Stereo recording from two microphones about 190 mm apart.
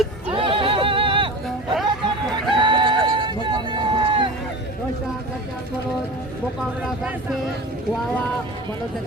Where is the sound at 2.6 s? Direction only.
25° right (ahead or behind).